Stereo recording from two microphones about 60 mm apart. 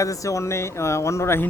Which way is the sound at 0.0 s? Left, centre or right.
Left.